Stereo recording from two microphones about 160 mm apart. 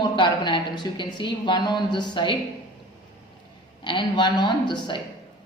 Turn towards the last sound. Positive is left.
turn(degrees=30)  # may be behind; listen again after turning